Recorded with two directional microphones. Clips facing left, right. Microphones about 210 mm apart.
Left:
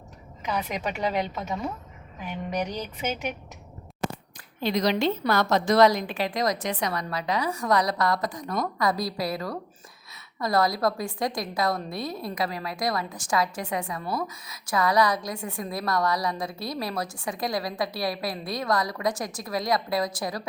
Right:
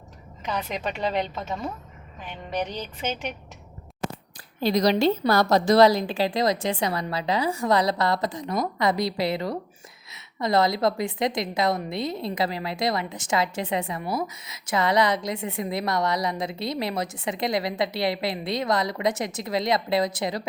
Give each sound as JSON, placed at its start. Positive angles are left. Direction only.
{"t": 0.4, "sound": "speech", "side_deg": 10}
{"t": 4.4, "sound": "a woman's voice", "side_deg": -35}